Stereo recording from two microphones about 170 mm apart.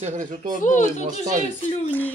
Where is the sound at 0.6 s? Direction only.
45° left (ahead or behind).